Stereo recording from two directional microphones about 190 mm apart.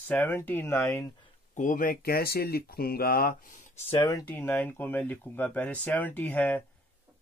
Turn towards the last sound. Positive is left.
turn(degrees=10)  # may be behind; listen again after turning